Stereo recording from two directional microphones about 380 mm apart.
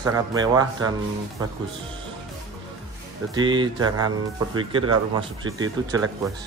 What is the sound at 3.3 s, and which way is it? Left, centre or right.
Speech, centre.